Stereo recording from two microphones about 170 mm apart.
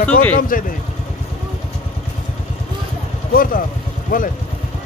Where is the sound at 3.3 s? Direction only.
55° left (ahead or behind).